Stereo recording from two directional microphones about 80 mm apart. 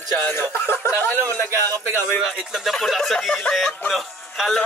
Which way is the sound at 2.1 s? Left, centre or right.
Centre.